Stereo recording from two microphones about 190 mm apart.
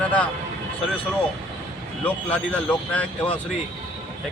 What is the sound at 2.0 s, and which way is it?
A man's voice, 5° left (ahead or behind).